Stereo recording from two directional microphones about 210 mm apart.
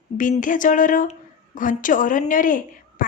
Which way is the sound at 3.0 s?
40° left (ahead or behind).